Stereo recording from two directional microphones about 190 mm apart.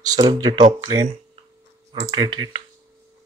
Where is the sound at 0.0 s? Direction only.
20° right (ahead or behind).